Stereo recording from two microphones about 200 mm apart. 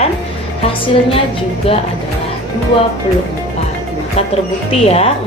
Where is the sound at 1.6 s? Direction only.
30° left (ahead or behind).